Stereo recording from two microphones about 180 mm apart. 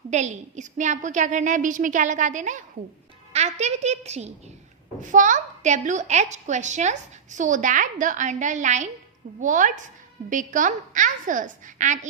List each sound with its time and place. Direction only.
0.1 s a woman's voice: 40° right (ahead or behind)